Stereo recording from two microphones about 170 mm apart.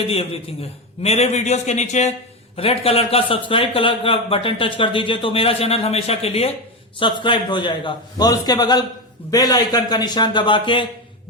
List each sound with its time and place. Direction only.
1.0 s a man's voice: 40° left (ahead or behind)